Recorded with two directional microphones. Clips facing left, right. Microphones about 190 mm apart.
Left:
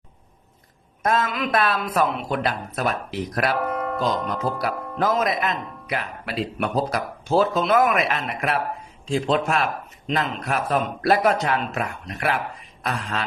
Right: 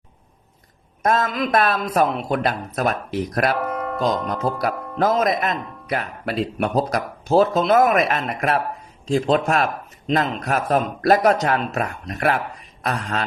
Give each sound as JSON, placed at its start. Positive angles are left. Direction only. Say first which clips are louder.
{"t": 1.0, "sound": "a man's voice", "louder": "right 2 dB", "side_deg": -40}
{"t": 3.6, "sound": "speech", "louder": "right 1 dB", "side_deg": 0}
{"t": 4.9, "sound": "a man's voice", "louder": "right 3 dB", "side_deg": -40}